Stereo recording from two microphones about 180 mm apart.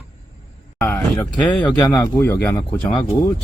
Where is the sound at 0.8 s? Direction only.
15° left (ahead or behind).